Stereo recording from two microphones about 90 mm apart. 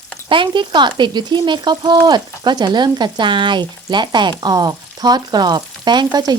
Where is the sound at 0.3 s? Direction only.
65° right (ahead or behind).